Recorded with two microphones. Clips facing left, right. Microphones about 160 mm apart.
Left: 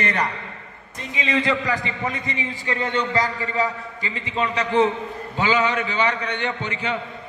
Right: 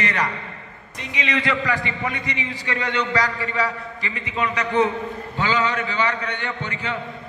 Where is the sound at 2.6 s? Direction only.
25° left (ahead or behind).